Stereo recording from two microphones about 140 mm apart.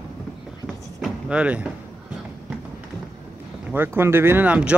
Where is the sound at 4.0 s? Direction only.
15° right (ahead or behind).